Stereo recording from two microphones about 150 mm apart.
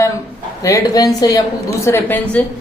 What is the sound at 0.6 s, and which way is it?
A woman's voice, 25° left (ahead or behind).